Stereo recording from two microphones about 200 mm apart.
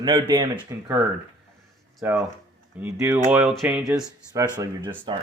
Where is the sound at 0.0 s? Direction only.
20° right (ahead or behind).